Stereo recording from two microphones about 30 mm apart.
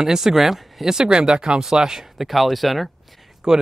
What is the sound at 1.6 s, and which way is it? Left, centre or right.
Speech, centre.